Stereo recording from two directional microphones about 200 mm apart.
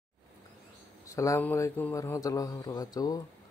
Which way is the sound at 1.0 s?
15° left (ahead or behind).